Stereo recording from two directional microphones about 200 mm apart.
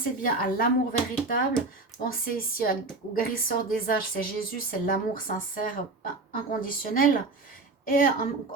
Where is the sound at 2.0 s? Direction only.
45° left (ahead or behind).